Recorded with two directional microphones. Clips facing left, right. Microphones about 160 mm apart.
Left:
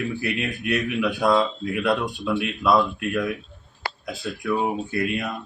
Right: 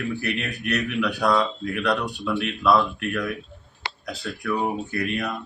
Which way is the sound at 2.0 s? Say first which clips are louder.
Left 1 dB; 20° left (ahead or behind).